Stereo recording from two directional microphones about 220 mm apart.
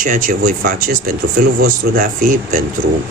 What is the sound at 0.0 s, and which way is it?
Speech, 40° right (ahead or behind).